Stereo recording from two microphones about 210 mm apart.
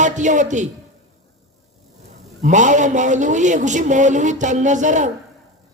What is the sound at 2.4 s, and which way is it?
Music, 35° right (ahead or behind).